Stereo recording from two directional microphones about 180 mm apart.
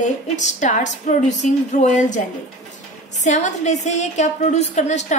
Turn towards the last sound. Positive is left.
turn(degrees=40)  # may be behind; listen again after turning